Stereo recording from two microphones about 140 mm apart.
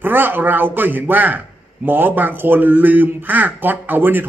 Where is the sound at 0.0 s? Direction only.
15° right (ahead or behind).